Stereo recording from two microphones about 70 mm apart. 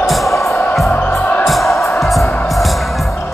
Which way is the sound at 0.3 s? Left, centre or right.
Left.